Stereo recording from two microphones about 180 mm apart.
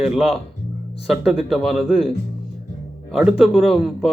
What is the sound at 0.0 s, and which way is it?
Speech, centre (ahead or behind).